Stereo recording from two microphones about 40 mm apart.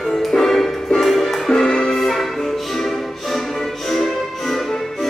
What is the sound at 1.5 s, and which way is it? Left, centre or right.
Music, centre.